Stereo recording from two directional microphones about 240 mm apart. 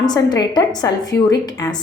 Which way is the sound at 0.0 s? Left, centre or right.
Centre.